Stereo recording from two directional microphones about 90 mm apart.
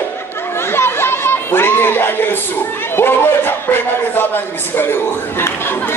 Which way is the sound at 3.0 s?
25° left (ahead or behind).